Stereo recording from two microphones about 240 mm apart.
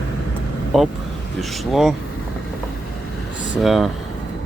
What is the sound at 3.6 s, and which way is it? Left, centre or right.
Speech, centre.